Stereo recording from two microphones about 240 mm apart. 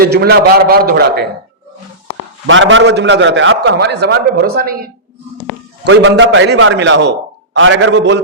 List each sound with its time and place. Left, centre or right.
0.0 s a man's voice: right
2.5 s a man's voice: right
5.8 s a man's voice: right